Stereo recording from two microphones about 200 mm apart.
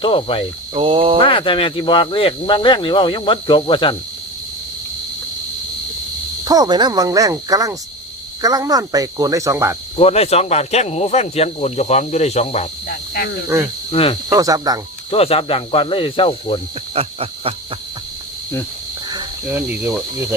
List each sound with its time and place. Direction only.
0.0 s speech: 25° left (ahead or behind)
0.7 s speech: 25° right (ahead or behind)
1.2 s speech: 25° left (ahead or behind)
6.4 s speech: 20° right (ahead or behind)
10.0 s speech: 30° left (ahead or behind)
13.1 s speech: 55° left (ahead or behind)
13.9 s speech: 30° left (ahead or behind)
14.3 s speech: 15° right (ahead or behind)
15.1 s speech: 30° left (ahead or behind)
16.9 s cricket: 30° right (ahead or behind)
19.1 s cricket: 10° right (ahead or behind)